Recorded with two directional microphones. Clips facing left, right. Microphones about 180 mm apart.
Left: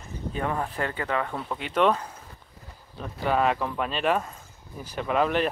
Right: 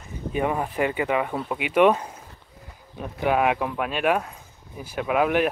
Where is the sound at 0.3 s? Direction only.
15° right (ahead or behind).